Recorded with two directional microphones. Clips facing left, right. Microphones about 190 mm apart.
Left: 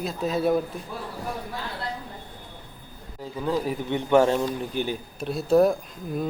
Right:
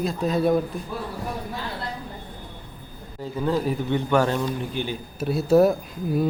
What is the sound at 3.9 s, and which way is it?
Speech, 25° left (ahead or behind).